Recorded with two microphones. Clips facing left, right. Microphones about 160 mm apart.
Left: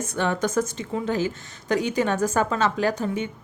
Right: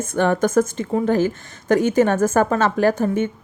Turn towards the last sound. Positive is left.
turn(degrees=-50)  # may be behind; listen again after turning